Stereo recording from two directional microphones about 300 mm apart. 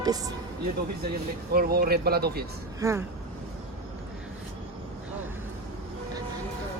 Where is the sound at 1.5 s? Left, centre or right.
Right.